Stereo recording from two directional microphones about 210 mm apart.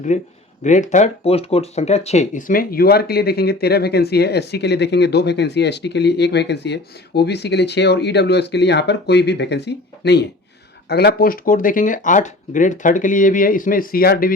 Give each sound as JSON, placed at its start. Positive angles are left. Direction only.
{"t": 0.1, "sound": "speech", "side_deg": 35}